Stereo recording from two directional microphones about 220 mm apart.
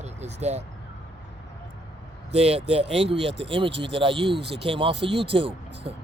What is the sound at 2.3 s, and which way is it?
Speech, 30° right (ahead or behind).